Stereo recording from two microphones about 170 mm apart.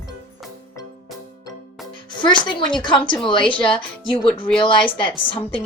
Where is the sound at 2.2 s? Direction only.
30° left (ahead or behind).